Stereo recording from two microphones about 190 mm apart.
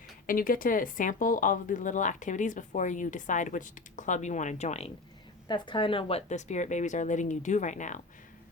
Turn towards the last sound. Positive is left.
turn(degrees=40)  # may be behind; listen again after turning